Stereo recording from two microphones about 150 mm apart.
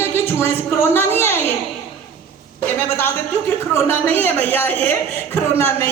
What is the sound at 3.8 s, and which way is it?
A woman's voice, 15° left (ahead or behind).